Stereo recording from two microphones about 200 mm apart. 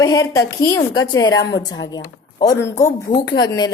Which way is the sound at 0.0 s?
15° left (ahead or behind).